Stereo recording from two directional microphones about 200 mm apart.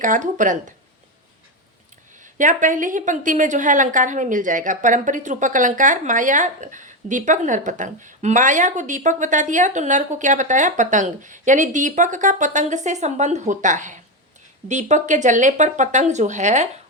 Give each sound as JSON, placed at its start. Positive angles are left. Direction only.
{"t": 0.0, "sound": "a woman's voice", "side_deg": -40}
{"t": 2.2, "sound": "a woman's voice", "side_deg": -40}